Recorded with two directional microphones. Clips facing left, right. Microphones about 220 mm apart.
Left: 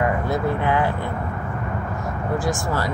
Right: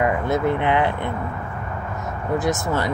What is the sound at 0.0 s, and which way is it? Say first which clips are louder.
Speech: right 2 dB; 20° right (ahead or behind).